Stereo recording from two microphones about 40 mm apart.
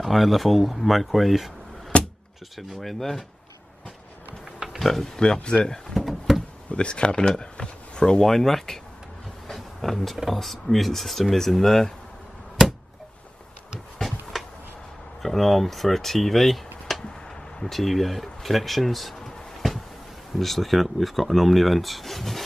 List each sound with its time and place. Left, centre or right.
0.0 s speech: centre
1.9 s a sound: left
2.5 s speech: centre
4.7 s speech: centre
5.1 s speech: centre
5.9 s a sound: centre
6.7 s speech: left
8.3 s speech: centre
9.5 s vehicle: centre
10.2 s speech: centre
12.6 s a sound: centre
14.3 s a sound: centre
15.2 s speech: centre
20.3 s speech: centre